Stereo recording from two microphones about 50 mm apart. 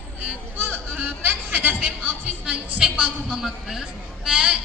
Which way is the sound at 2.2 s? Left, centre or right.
Right.